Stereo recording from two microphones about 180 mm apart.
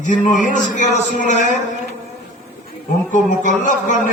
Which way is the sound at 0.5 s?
45° left (ahead or behind).